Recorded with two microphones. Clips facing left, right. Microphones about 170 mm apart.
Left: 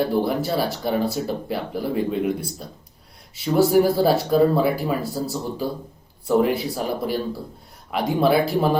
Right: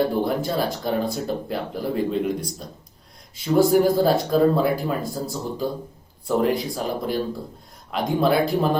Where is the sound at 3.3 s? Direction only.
5° left (ahead or behind).